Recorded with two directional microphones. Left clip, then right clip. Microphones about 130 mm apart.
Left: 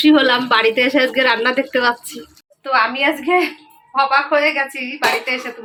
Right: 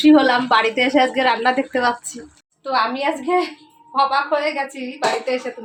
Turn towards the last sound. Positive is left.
turn(degrees=0)  # may be behind; listen again after turning